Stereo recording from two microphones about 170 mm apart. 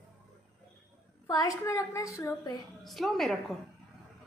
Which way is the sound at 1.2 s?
20° left (ahead or behind).